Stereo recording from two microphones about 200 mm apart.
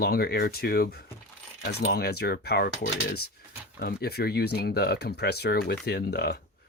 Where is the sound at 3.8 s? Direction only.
50° left (ahead or behind).